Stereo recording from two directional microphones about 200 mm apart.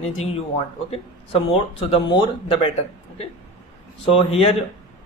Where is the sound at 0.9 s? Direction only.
30° left (ahead or behind).